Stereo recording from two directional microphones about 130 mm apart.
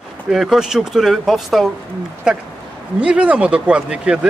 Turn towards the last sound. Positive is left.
turn(degrees=-5)  # may be behind; listen again after turning